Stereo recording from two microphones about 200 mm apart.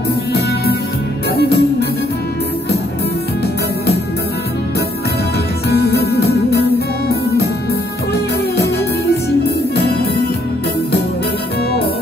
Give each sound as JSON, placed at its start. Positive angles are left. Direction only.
{"t": 1.3, "sound": "music", "side_deg": 55}
{"t": 5.7, "sound": "music", "side_deg": 50}
{"t": 8.1, "sound": "music", "side_deg": 55}